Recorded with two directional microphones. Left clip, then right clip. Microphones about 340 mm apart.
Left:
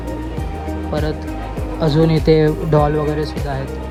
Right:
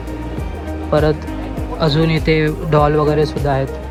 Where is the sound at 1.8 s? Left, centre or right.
Centre.